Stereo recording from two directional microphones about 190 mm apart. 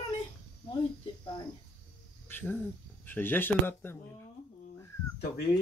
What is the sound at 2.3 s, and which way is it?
Speech, 10° left (ahead or behind).